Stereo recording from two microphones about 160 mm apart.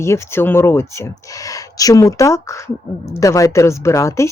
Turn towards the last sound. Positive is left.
turn(degrees=20)  # may be behind; listen again after turning